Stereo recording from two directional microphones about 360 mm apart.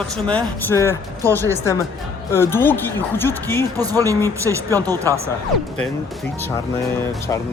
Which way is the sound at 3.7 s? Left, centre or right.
Centre.